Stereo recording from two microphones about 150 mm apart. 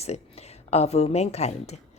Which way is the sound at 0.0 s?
45° left (ahead or behind).